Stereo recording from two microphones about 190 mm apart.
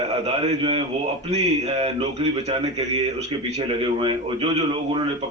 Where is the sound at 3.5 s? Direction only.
25° right (ahead or behind).